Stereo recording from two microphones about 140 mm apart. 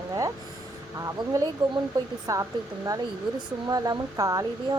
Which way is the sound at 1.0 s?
25° right (ahead or behind).